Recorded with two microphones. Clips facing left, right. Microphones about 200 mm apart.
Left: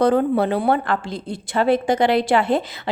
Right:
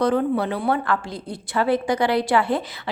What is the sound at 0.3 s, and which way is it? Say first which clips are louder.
A woman's voice: left 4 dB; 30° left (ahead or behind).